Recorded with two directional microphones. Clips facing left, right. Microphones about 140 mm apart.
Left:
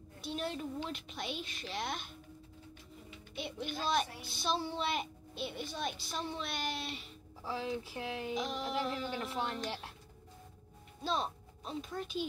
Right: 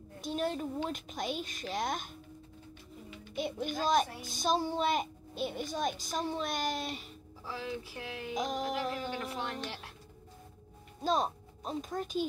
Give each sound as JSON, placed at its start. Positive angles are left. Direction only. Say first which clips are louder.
{"t": 0.2, "sound": "a woman's voice", "louder": "right 5 dB", "side_deg": -45}
{"t": 3.3, "sound": "a child's voice", "louder": "right 5 dB", "side_deg": -45}
{"t": 7.4, "sound": "speech", "louder": "left 2 dB", "side_deg": 30}
{"t": 8.4, "sound": "a child's voice", "louder": "right 5 dB", "side_deg": -45}
{"t": 11.0, "sound": "speech", "louder": "right 5 dB", "side_deg": -45}